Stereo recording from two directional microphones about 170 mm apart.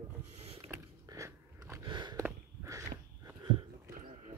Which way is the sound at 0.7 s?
20° right (ahead or behind).